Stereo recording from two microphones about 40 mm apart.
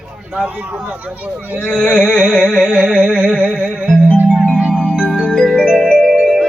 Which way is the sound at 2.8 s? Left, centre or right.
Right.